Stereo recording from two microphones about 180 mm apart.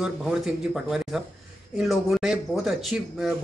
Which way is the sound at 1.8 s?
Centre (ahead or behind).